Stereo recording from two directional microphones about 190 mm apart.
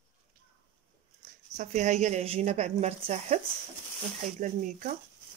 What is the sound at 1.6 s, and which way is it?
A woman's voice, 40° right (ahead or behind).